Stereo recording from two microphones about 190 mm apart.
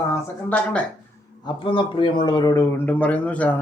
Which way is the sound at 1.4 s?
25° left (ahead or behind).